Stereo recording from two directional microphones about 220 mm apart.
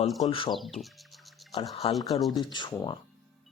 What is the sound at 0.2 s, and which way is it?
Speech, 25° left (ahead or behind).